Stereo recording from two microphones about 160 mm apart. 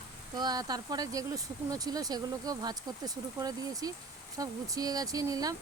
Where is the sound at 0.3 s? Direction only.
25° right (ahead or behind).